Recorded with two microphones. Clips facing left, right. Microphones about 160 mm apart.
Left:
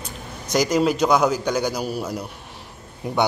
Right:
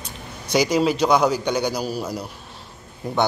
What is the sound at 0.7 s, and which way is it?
Speech, 5° left (ahead or behind).